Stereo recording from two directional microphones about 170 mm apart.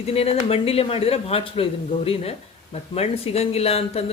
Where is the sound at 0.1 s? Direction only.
35° left (ahead or behind).